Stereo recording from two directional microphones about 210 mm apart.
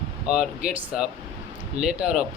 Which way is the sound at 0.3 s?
5° right (ahead or behind).